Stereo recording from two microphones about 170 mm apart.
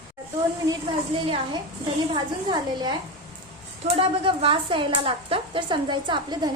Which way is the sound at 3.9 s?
30° right (ahead or behind).